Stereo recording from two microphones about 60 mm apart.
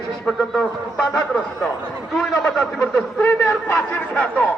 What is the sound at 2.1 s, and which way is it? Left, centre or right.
A man's voice, centre.